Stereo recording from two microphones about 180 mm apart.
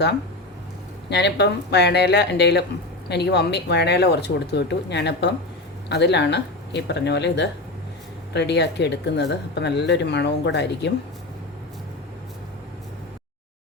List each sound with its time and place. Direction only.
1.1 s speech: 70° left (ahead or behind)